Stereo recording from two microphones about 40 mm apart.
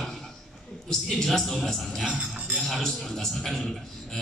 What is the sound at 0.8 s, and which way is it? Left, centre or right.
A man's voice, centre.